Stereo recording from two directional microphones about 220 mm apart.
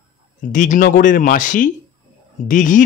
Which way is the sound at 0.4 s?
35° left (ahead or behind).